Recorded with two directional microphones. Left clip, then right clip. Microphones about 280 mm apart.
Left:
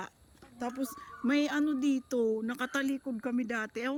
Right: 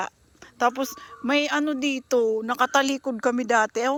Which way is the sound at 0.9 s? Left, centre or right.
Centre.